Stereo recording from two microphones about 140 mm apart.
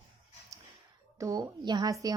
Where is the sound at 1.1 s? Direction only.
25° right (ahead or behind).